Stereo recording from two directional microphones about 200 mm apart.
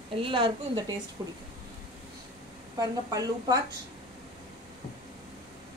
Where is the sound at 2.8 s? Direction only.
20° right (ahead or behind).